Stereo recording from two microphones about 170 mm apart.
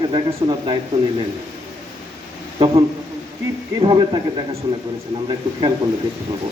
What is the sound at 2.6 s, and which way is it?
Speech, 35° right (ahead or behind).